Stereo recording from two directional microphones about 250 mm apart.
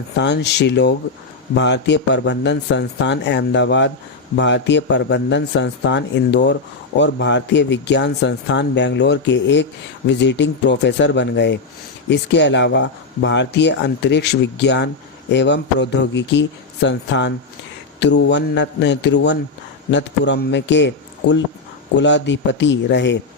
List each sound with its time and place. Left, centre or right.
0.2 s a man's voice: left